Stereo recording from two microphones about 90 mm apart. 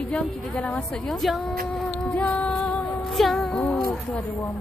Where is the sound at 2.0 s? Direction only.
20° left (ahead or behind).